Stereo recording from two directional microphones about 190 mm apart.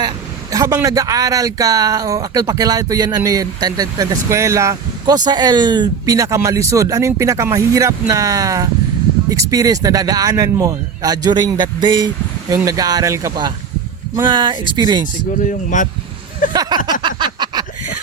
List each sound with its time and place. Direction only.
0.5 s speech: 15° right (ahead or behind)
15.4 s speech: 40° left (ahead or behind)
16.5 s speech: 20° right (ahead or behind)
17.0 s a sound: 25° right (ahead or behind)